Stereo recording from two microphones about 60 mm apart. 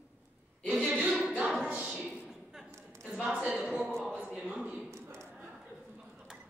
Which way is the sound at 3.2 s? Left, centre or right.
Right.